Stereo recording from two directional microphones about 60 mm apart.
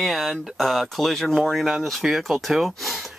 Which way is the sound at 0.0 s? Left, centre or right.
Centre.